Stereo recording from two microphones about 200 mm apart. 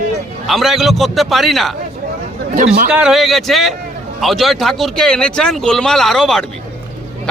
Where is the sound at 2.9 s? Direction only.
5° right (ahead or behind).